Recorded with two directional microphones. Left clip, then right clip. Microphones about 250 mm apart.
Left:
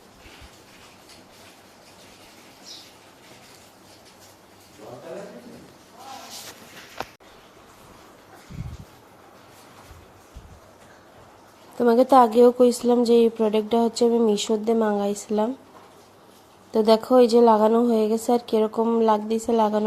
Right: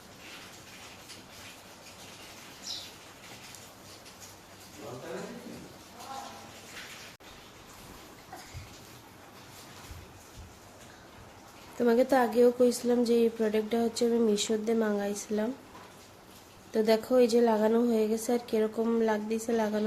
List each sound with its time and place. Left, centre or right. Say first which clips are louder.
11.9 s a woman's voice: left 9 dB; left
16.7 s a woman's voice: left 8 dB; left